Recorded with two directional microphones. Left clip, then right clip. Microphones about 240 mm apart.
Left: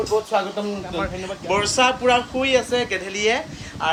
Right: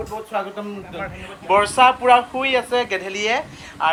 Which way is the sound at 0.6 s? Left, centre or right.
Left.